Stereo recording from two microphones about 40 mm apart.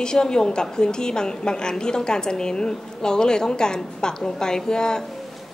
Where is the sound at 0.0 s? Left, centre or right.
Centre.